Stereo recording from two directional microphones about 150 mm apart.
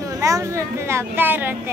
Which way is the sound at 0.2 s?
20° right (ahead or behind).